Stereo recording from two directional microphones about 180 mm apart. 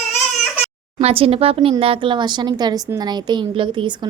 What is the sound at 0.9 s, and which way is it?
A woman's voice, 30° right (ahead or behind).